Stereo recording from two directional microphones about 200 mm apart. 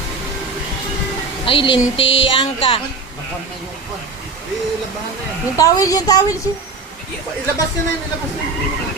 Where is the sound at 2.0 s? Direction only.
70° left (ahead or behind).